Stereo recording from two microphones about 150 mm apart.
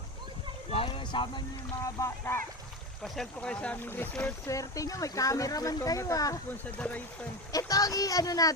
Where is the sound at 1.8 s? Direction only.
20° left (ahead or behind).